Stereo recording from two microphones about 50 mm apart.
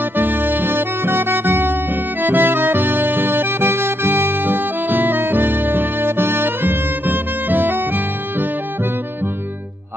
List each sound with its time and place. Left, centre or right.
0.2 s music: right